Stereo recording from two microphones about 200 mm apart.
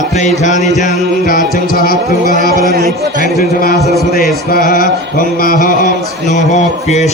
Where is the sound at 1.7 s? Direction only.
45° left (ahead or behind).